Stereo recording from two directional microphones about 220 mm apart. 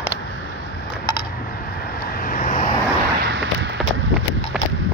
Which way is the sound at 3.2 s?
55° right (ahead or behind).